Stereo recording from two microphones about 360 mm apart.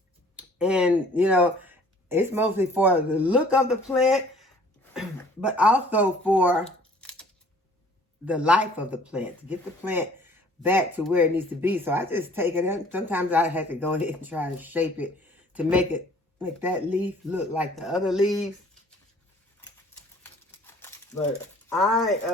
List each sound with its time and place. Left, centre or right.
0.3 s speech: centre
7.0 s a sound: centre
8.2 s speech: centre
20.7 s crumpling: centre
21.7 s speech: centre